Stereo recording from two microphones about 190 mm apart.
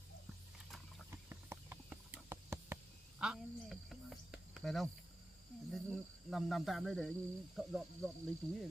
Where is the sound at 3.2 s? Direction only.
Centre (ahead or behind).